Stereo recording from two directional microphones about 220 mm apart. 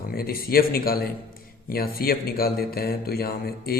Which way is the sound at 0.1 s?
40° left (ahead or behind).